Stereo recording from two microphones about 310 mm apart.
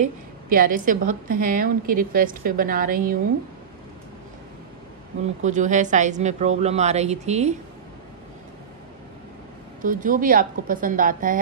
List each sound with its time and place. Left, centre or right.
0.5 s a woman's voice: right
5.4 s a woman's voice: right
9.8 s a woman's voice: right